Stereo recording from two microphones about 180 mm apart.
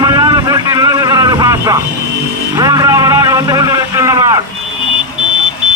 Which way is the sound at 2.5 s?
20° right (ahead or behind).